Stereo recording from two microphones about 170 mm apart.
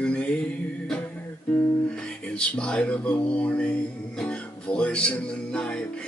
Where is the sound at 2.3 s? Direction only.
5° left (ahead or behind).